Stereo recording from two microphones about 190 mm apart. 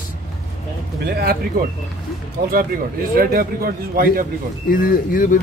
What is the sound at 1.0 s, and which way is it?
Speech, 55° right (ahead or behind).